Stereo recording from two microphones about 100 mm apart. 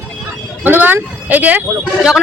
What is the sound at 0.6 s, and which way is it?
Speech, 20° right (ahead or behind).